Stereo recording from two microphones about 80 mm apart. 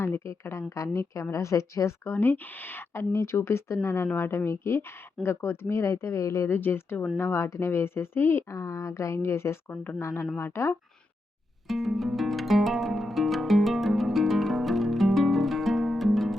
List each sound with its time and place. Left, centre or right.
0.0 s speech: left
2.1 s speech: left
11.7 s music: centre